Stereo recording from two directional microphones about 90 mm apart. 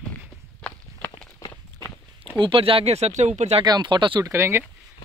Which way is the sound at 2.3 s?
70° right (ahead or behind).